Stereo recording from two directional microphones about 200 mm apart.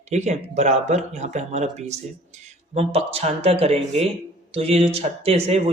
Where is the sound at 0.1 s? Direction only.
35° right (ahead or behind).